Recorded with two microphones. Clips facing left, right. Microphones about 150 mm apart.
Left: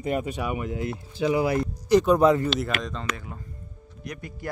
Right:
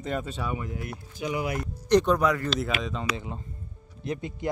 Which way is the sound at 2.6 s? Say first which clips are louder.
Even; centre (ahead or behind).